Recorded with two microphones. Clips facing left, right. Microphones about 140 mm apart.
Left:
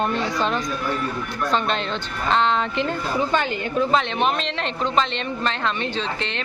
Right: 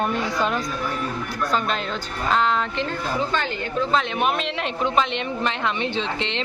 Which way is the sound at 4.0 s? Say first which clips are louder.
Left 1 dB; 5° right (ahead or behind).